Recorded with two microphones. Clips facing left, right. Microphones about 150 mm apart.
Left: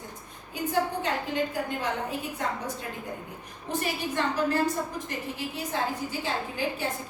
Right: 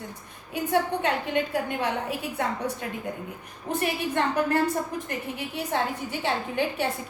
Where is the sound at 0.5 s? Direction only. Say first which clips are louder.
Right 3 dB; 65° right (ahead or behind).